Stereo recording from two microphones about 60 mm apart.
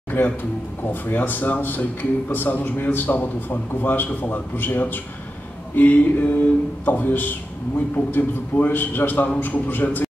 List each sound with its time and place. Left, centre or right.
0.1 s a man's voice: left
5.8 s a sound: left
6.9 s a man's voice: left